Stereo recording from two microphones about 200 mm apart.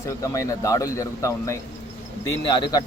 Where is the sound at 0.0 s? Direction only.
15° left (ahead or behind).